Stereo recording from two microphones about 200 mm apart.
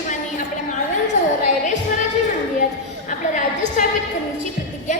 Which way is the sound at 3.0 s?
40° left (ahead or behind).